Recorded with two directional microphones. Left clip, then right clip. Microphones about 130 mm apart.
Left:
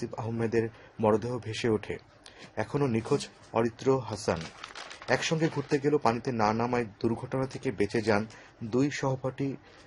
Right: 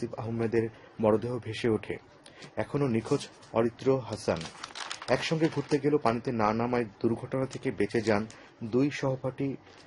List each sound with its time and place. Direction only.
0.2 s speech: 25° left (ahead or behind)
4.4 s speech: 25° right (ahead or behind)
5.0 s speech: 25° left (ahead or behind)